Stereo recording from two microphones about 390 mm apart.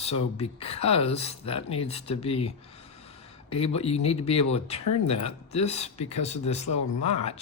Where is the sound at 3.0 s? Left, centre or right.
Centre.